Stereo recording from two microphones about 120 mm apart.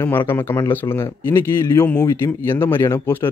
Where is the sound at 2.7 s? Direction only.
20° left (ahead or behind).